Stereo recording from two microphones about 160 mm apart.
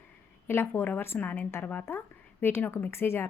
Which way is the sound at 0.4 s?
15° left (ahead or behind).